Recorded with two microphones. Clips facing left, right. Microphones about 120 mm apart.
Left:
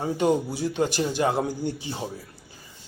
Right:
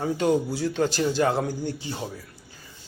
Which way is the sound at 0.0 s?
20° left (ahead or behind).